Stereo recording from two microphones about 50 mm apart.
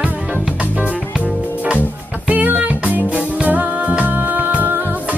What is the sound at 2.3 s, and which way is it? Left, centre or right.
Music, right.